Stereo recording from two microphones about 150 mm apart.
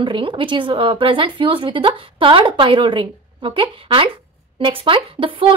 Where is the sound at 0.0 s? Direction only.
35° right (ahead or behind).